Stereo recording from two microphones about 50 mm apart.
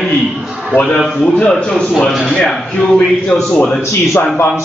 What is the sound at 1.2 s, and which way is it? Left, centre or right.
Speech, centre.